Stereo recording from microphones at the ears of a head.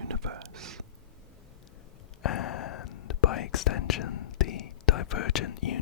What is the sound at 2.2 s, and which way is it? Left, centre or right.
Whispering, left.